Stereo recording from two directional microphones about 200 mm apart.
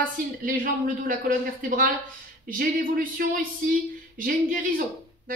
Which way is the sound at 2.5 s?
45° right (ahead or behind).